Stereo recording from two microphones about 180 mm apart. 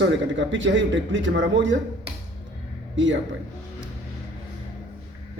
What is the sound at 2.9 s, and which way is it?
Speech, 90° right.